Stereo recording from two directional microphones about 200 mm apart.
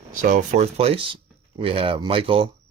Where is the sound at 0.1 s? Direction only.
40° right (ahead or behind).